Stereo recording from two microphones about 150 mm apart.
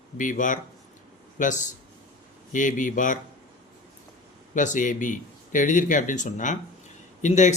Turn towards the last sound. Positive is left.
turn(degrees=55)  # may be behind; listen again after turning